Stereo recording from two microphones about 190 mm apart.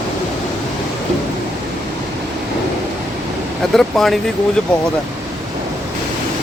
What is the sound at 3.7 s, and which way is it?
Speech, centre (ahead or behind).